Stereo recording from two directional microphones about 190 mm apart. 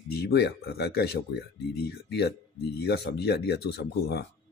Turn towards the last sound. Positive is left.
turn(degrees=60)  # may be behind; listen again after turning